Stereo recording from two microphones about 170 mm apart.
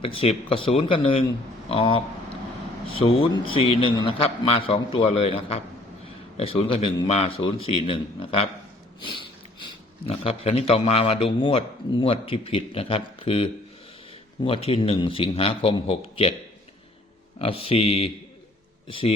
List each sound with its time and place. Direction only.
0.0 s a man's voice: 35° left (ahead or behind)
3.0 s a man's voice: 35° left (ahead or behind)
17.4 s a man's voice: 35° left (ahead or behind)